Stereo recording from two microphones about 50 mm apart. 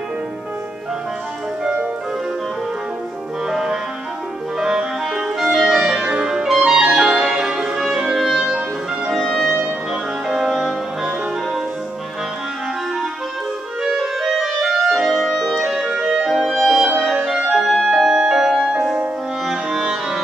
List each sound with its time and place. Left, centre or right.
3.4 s music: centre
4.6 s clarinet: centre
5.4 s music: centre
5.9 s music: centre
6.4 s clarinet: centre
7.2 s music: centre
8.2 s music: centre
8.5 s music: centre
9.1 s music: centre
10.2 s music: centre
13.8 s clarinet: centre
15.5 s music: centre
19.4 s music: centre
19.8 s music: centre